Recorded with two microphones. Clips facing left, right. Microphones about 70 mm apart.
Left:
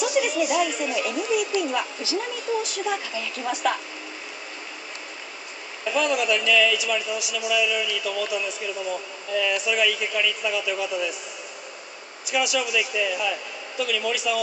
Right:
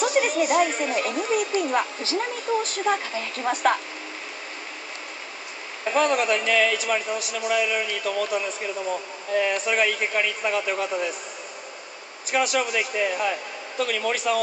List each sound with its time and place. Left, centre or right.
0.0 s a man's voice: right
5.9 s a man's voice: right
12.3 s a man's voice: right